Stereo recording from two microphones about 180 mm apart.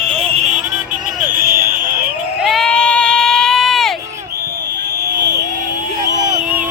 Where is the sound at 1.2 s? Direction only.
55° right (ahead or behind).